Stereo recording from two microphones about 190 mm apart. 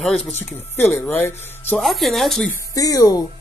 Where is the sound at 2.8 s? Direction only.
20° left (ahead or behind).